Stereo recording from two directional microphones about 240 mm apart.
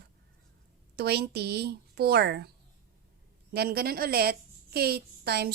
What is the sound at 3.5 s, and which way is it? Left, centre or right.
A woman's voice, right.